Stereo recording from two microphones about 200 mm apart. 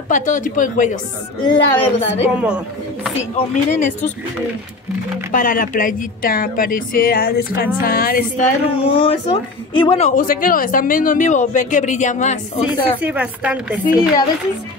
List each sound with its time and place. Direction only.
0.1 s speech: 40° left (ahead or behind)
1.4 s a woman's voice: 25° left (ahead or behind)
2.3 s speech: 5° right (ahead or behind)
3.3 s speech: 40° left (ahead or behind)
5.3 s speech: 45° left (ahead or behind)
8.8 s speech: 25° left (ahead or behind)
12.6 s speech: 5° right (ahead or behind)